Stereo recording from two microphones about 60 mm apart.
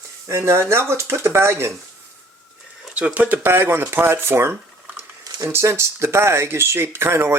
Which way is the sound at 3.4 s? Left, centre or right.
Right.